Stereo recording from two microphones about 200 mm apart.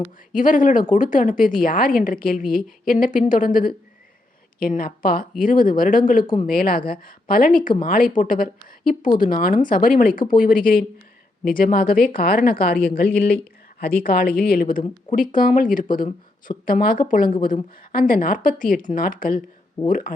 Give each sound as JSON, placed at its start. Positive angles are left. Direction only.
{"t": 0.3, "sound": "a woman's voice", "side_deg": 40}